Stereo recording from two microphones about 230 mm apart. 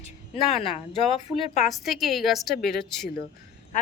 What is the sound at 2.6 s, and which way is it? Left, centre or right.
Speech, left.